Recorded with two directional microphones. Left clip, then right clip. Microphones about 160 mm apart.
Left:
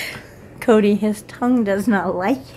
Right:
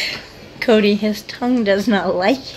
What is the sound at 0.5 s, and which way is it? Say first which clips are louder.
A woman's voice: right 1 dB; 20° left (ahead or behind).